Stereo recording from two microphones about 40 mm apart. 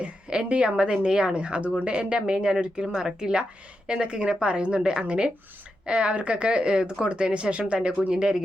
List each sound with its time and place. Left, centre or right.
0.0 s a woman's voice: right